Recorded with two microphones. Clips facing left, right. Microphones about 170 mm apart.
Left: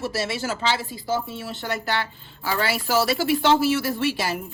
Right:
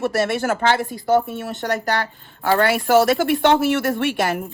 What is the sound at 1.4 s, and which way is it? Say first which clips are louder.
Speech: right 6 dB; 45° right (ahead or behind).